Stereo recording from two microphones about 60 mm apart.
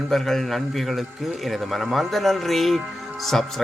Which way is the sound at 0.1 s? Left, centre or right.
Centre.